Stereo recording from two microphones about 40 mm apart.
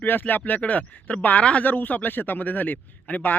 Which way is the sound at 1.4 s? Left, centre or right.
Left.